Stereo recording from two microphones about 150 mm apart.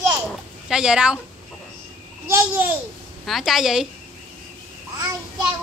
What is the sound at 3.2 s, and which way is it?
Speech, centre (ahead or behind).